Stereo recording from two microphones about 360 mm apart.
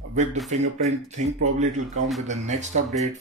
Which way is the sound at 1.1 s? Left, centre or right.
Centre.